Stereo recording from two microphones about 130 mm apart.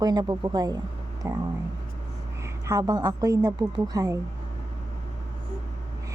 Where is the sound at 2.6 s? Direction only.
25° right (ahead or behind).